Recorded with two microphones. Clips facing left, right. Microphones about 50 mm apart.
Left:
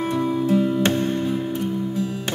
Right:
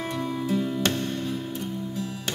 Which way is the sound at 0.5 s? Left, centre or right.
Left.